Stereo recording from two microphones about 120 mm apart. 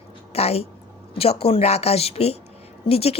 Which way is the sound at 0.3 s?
55° left (ahead or behind).